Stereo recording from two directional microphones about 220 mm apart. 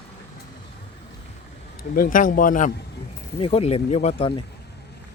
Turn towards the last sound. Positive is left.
turn(degrees=25)  # may be behind; listen again after turning